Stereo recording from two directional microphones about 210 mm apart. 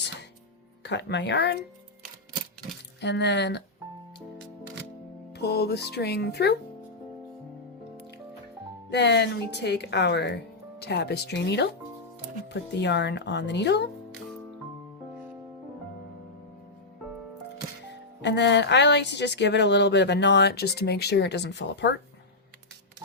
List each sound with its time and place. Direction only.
0.8 s speech: 55° left (ahead or behind)
3.0 s speech: 55° left (ahead or behind)
5.3 s speech: 50° left (ahead or behind)
8.9 s speech: 55° left (ahead or behind)
12.7 s speech: 55° left (ahead or behind)
18.2 s speech: 55° left (ahead or behind)